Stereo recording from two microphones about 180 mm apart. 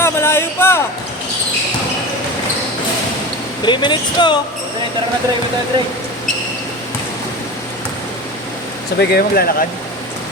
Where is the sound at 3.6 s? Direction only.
25° left (ahead or behind).